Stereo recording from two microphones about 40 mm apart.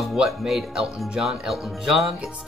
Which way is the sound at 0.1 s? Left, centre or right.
Centre.